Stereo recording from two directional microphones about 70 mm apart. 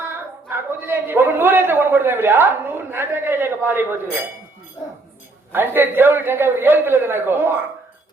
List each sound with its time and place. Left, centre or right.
0.5 s a man's voice: right
5.5 s a man's voice: right